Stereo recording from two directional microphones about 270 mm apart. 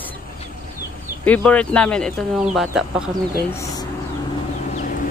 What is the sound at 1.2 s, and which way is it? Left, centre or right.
Speech, centre.